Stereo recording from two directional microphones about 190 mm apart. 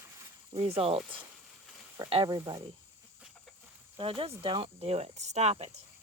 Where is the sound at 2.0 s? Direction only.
25° right (ahead or behind).